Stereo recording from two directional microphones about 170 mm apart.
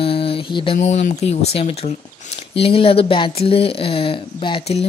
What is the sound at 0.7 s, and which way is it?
Speech, 45° left (ahead or behind).